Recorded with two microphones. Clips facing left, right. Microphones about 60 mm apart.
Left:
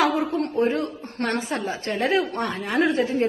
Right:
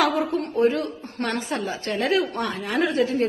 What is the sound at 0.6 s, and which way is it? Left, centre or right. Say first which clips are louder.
Speech: right 4 dB; left.